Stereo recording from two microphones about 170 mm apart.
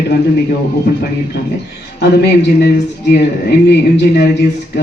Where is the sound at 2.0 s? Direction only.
75° left (ahead or behind).